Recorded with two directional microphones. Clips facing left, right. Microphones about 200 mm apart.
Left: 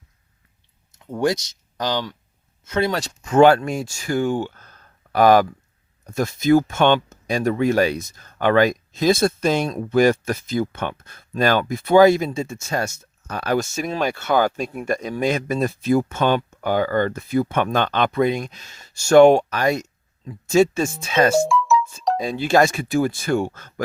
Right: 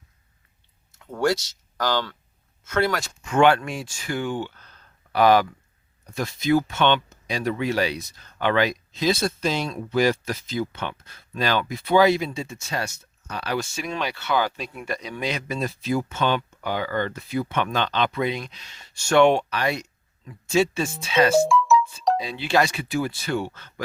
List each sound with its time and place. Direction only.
0.9 s speech: 15° left (ahead or behind)
2.9 s speech: 35° left (ahead or behind)
21.3 s music: centre (ahead or behind)
22.2 s speech: 45° left (ahead or behind)